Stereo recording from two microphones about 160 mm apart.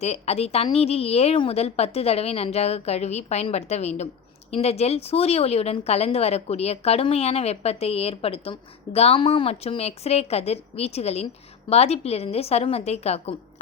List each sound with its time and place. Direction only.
0.0 s a woman's voice: 40° left (ahead or behind)